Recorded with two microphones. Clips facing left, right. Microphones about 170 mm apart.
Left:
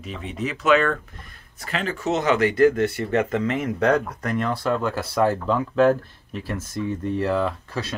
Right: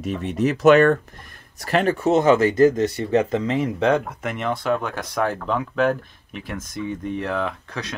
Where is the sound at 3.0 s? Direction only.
25° right (ahead or behind).